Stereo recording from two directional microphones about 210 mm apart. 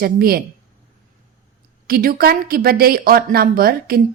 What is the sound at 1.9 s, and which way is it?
Speech, 45° right (ahead or behind).